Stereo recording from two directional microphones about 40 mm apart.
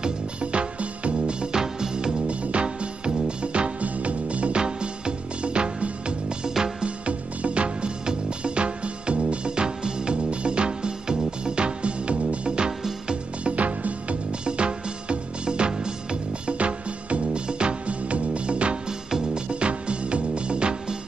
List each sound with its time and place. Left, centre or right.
0.0 s music: right
2.2 s music: right
18.9 s music: centre
19.5 s music: right